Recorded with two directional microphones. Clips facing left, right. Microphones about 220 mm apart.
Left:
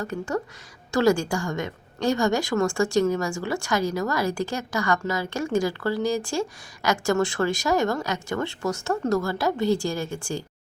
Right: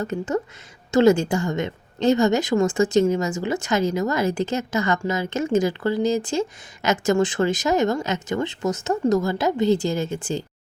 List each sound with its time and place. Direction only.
0.0 s a woman's voice: 20° right (ahead or behind)